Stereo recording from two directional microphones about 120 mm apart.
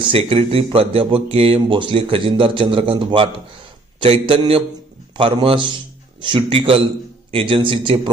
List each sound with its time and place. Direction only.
0.0 s speech: 50° right (ahead or behind)